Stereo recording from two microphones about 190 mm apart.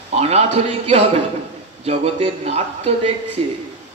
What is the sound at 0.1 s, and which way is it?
A man's voice, 35° right (ahead or behind).